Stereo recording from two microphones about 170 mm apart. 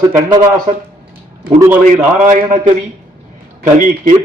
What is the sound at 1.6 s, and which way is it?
Speech, 10° right (ahead or behind).